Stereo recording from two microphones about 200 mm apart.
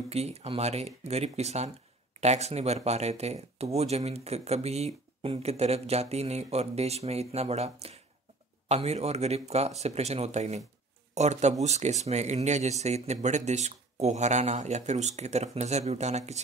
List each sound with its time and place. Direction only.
0.1 s speech: 30° right (ahead or behind)